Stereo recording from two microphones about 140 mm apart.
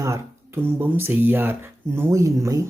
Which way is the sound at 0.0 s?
20° right (ahead or behind).